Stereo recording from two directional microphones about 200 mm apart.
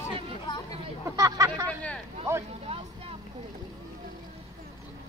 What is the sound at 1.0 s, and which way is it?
Hubbub, 15° right (ahead or behind).